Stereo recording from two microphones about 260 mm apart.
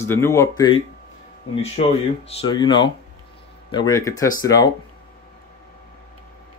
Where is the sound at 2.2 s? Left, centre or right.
Centre.